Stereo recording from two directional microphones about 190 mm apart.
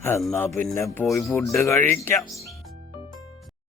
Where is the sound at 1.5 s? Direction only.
15° left (ahead or behind).